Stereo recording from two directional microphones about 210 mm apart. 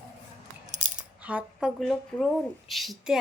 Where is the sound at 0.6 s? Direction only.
35° right (ahead or behind).